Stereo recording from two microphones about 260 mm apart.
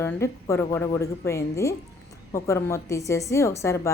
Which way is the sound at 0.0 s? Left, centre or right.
Centre.